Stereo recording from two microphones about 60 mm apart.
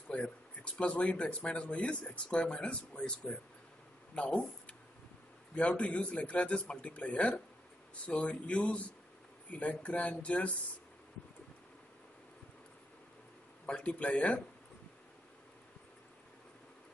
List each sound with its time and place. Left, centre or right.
0.1 s speech: left
13.7 s speech: centre